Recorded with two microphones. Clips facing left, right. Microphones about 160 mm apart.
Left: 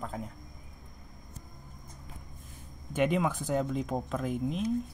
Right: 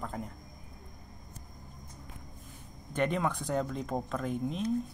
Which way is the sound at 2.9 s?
5° left (ahead or behind).